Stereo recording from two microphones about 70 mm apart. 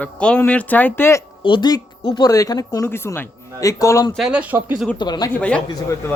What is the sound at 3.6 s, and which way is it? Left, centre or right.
Speech, left.